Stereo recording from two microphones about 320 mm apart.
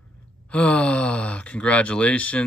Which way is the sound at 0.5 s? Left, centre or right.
Centre.